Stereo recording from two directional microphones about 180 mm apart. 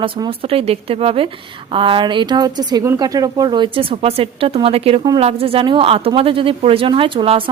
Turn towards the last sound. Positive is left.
turn(degrees=-30)  # may be behind; listen again after turning